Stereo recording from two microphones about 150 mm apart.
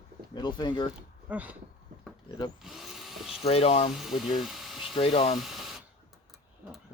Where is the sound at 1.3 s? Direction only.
10° right (ahead or behind).